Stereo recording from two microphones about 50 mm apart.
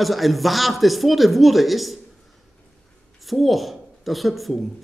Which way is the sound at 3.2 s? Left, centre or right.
Centre.